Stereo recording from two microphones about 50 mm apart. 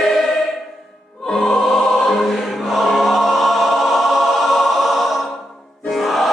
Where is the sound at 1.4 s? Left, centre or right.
Centre.